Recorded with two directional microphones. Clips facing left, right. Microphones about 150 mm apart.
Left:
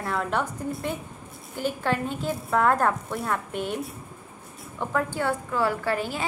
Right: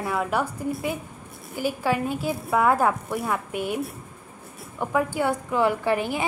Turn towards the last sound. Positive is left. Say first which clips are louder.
# right 3 dB
turn(degrees=-15)  # may be behind; listen again after turning